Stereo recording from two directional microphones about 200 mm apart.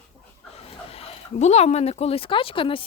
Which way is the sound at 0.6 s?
30° left (ahead or behind).